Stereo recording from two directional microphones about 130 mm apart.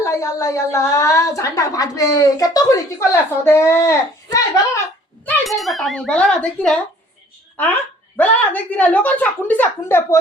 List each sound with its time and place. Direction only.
0.0 s a woman's voice: 25° left (ahead or behind)
5.4 s a child's voice: centre (ahead or behind)
8.1 s a woman's voice: 10° left (ahead or behind)